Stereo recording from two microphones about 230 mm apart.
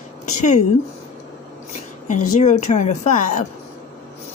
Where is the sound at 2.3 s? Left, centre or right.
Left.